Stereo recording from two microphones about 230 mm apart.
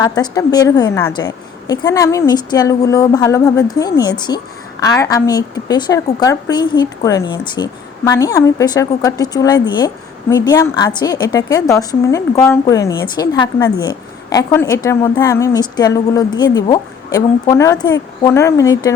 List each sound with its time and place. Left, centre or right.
0.0 s a woman's voice: centre